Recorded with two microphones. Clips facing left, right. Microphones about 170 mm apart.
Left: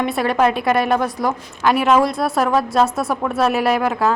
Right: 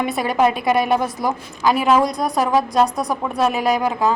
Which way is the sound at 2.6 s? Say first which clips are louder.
Right 1 dB; 15° right (ahead or behind).